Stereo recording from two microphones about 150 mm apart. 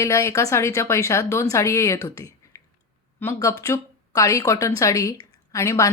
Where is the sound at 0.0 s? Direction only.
20° left (ahead or behind).